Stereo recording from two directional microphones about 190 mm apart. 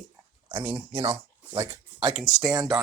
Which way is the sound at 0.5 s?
20° right (ahead or behind).